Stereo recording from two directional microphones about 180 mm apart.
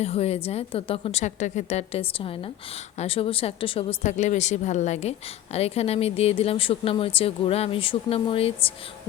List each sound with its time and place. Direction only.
0.0 s speech: 35° left (ahead or behind)